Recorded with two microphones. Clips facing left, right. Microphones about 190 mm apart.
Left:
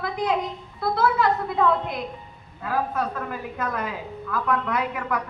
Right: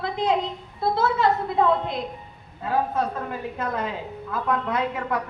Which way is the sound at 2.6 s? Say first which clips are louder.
Right 2 dB; 25° right (ahead or behind).